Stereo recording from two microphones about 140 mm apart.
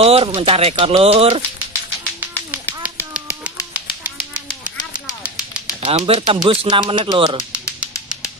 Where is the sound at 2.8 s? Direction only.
10° right (ahead or behind).